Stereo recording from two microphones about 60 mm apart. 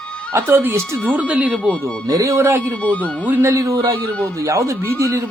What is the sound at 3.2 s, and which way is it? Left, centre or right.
Speech, right.